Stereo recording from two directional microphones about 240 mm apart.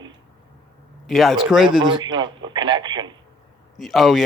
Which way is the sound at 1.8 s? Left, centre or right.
Centre.